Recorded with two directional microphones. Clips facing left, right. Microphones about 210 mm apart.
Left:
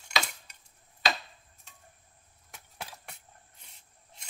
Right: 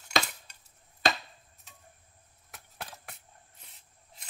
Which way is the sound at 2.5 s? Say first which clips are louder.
Even; centre (ahead or behind).